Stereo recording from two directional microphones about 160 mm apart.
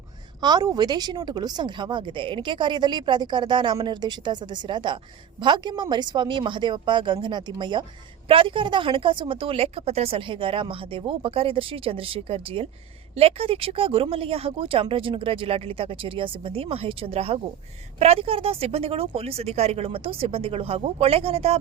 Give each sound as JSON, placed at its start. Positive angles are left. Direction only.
{"t": 0.4, "sound": "a woman's voice", "side_deg": -25}